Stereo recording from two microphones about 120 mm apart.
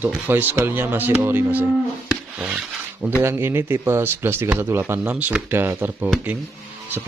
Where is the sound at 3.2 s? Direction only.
20° right (ahead or behind).